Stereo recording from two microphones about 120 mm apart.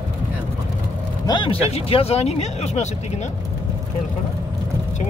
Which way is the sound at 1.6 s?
55° left (ahead or behind).